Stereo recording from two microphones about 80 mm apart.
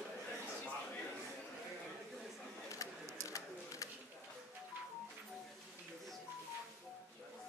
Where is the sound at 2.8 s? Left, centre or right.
Left.